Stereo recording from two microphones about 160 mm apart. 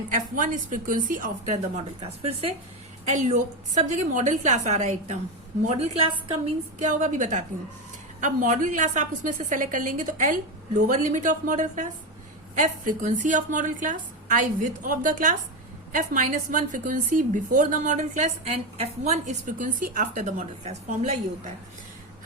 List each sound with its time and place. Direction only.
0.1 s a woman's voice: 55° right (ahead or behind)
2.0 s a woman's voice: 35° right (ahead or behind)
3.1 s a woman's voice: 50° right (ahead or behind)
6.7 s a woman's voice: 50° right (ahead or behind)